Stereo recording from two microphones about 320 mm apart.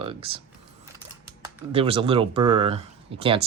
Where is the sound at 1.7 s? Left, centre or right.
Centre.